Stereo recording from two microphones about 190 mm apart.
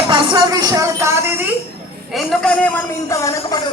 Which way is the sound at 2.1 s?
5° left (ahead or behind).